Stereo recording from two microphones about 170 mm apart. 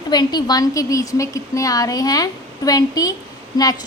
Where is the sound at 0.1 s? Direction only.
25° left (ahead or behind).